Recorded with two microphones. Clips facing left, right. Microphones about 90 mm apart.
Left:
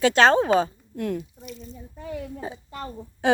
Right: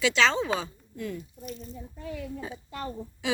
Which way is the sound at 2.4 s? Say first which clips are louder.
Left 2 dB; 30° left (ahead or behind).